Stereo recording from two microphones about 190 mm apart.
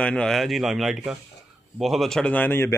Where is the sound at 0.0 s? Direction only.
5° left (ahead or behind).